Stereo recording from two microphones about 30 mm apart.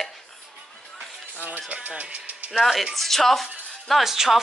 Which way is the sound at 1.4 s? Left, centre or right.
Right.